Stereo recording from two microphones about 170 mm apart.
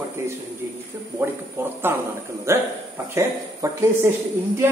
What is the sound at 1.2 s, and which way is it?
A man's voice, 15° right (ahead or behind).